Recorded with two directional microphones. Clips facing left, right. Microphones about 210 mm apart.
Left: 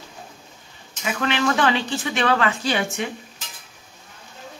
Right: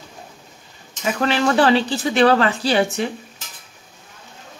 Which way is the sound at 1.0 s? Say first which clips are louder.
Right 3 dB; 35° right (ahead or behind).